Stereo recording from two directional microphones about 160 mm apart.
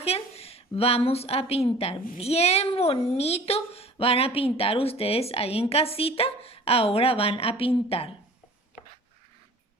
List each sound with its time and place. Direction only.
0.0 s speech: 40° left (ahead or behind)